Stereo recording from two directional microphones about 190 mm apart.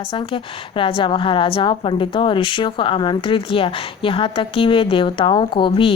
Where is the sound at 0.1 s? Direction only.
25° left (ahead or behind).